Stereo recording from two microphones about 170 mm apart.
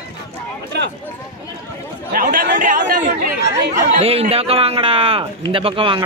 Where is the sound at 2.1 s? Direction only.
55° right (ahead or behind).